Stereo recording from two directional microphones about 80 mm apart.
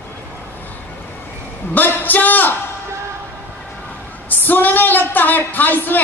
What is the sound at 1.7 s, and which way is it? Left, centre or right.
Music, left.